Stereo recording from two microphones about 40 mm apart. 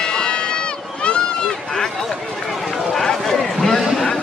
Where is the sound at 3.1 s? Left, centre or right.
Centre.